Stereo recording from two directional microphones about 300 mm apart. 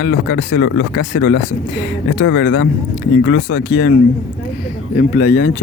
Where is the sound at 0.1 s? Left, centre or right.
Left.